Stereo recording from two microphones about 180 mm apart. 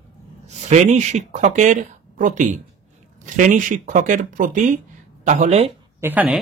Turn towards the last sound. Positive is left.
turn(degrees=-10)  # may be behind; listen again after turning